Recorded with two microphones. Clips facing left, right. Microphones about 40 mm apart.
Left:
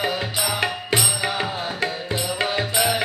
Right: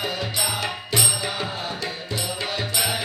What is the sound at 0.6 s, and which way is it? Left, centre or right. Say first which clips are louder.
Music: left 3 dB; left.